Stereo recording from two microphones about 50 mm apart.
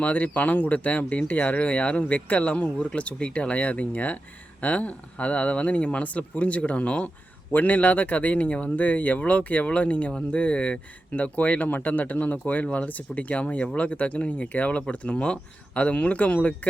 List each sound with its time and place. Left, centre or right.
0.0 s speech: left
11.1 s speech: left